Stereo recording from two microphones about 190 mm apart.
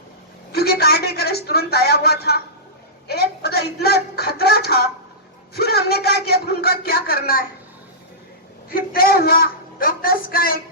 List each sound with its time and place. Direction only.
0.5 s a sound: 55° left (ahead or behind)
3.1 s a man's voice: 55° left (ahead or behind)
8.7 s speech: 50° left (ahead or behind)